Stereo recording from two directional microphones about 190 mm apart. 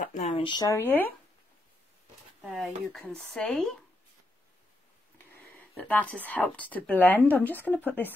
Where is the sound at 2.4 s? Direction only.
Centre (ahead or behind).